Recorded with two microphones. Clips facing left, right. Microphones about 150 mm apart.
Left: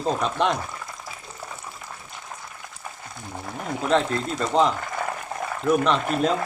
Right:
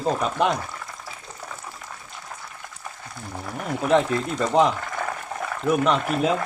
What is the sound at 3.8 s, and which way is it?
Speech, 15° right (ahead or behind).